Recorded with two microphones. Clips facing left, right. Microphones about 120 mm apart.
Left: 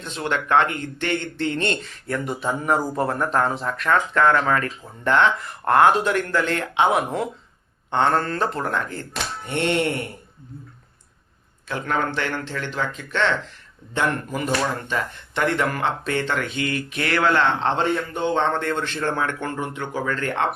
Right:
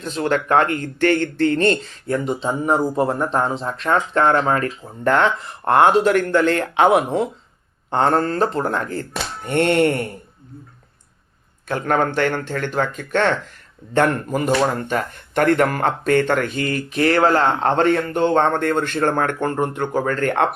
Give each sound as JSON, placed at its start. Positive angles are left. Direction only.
{"t": 0.0, "sound": "speech", "side_deg": -40}
{"t": 9.5, "sound": "speech", "side_deg": -50}
{"t": 11.7, "sound": "speech", "side_deg": -50}
{"t": 17.8, "sound": "speech", "side_deg": -60}